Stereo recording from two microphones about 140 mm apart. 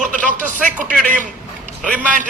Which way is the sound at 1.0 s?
65° right (ahead or behind).